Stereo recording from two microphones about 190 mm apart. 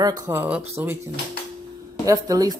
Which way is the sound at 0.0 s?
15° right (ahead or behind).